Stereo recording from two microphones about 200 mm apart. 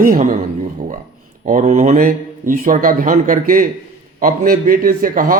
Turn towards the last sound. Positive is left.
turn(degrees=-45)  # may be behind; listen again after turning